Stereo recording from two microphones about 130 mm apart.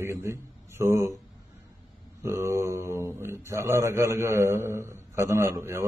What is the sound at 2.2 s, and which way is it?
Speech, 20° right (ahead or behind).